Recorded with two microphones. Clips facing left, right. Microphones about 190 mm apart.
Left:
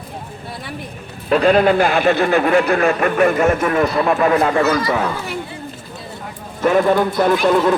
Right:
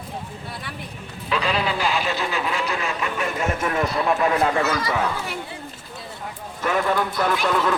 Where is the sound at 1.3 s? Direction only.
50° left (ahead or behind).